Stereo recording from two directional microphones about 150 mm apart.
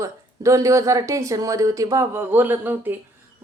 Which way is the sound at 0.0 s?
20° right (ahead or behind).